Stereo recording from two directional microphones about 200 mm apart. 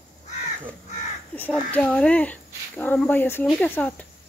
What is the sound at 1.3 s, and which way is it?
Speech, 10° left (ahead or behind).